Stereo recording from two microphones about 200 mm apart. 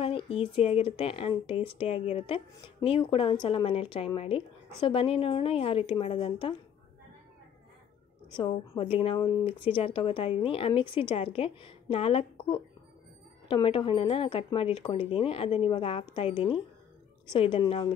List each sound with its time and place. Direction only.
0.0 s speech: 25° left (ahead or behind)
8.4 s speech: 25° left (ahead or behind)